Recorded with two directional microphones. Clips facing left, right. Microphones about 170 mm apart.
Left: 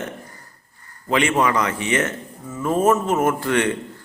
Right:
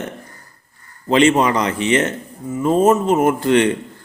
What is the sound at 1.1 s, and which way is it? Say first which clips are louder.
A man's voice: right 5 dB; 25° right (ahead or behind).